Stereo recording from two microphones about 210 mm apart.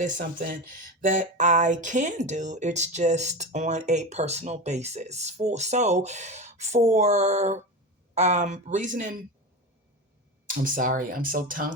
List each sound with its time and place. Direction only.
0.0 s speech: 40° right (ahead or behind)
10.4 s speech: 40° right (ahead or behind)